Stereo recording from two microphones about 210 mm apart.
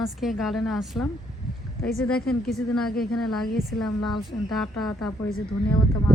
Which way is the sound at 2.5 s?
Centre (ahead or behind).